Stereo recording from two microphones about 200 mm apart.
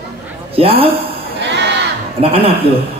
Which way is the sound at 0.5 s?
30° right (ahead or behind).